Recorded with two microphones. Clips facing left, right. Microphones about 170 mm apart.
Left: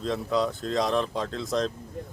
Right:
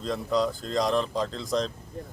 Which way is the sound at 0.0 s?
Centre (ahead or behind).